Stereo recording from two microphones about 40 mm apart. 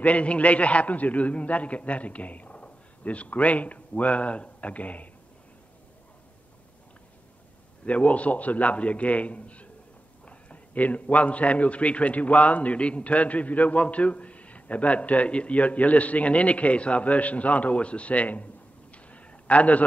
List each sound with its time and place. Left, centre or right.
0.0 s a man's voice: left
7.8 s a man's voice: left